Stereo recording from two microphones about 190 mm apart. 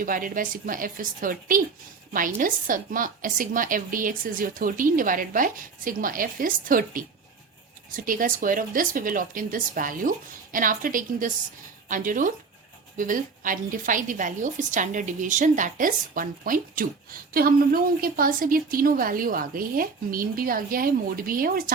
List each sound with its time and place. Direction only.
0.0 s speech: 45° right (ahead or behind)